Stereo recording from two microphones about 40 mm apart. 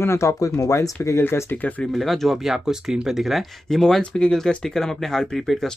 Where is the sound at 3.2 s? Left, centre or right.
Centre.